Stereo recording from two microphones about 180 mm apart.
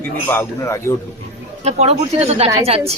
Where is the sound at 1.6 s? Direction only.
35° right (ahead or behind).